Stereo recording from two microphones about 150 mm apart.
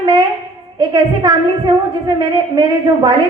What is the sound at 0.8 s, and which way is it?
A woman's voice, 25° right (ahead or behind).